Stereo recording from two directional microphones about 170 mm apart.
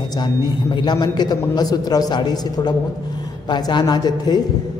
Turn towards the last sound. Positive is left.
turn(degrees=25)  # may be behind; listen again after turning